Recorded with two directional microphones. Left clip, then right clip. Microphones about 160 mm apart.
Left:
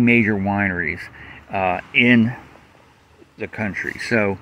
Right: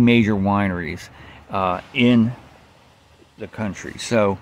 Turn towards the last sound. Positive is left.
turn(degrees=-35)  # may be behind; listen again after turning